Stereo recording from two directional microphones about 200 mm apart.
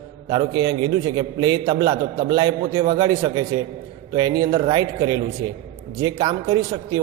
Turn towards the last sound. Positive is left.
turn(degrees=-20)  # may be behind; listen again after turning